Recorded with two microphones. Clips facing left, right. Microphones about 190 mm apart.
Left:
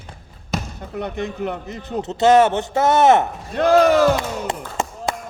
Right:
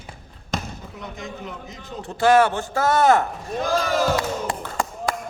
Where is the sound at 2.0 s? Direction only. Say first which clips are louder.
Left 3 dB; 20° left (ahead or behind).